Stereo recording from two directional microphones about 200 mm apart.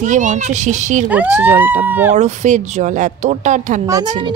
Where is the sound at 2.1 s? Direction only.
35° right (ahead or behind).